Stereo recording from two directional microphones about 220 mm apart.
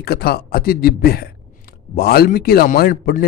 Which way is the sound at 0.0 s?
45° left (ahead or behind).